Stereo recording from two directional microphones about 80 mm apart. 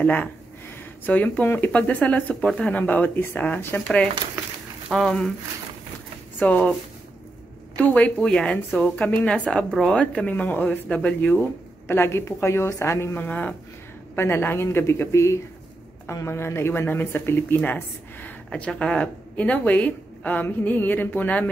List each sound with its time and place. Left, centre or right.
0.0 s speech: centre
0.7 s a sound: centre
1.7 s speech: centre
4.9 s speech: centre
6.4 s speech: centre
7.7 s speech: centre
11.9 s a woman's voice: left
14.1 s a woman's voice: left
18.5 s a woman's voice: centre